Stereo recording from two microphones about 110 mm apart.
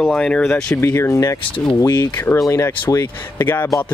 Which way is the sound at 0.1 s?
10° left (ahead or behind).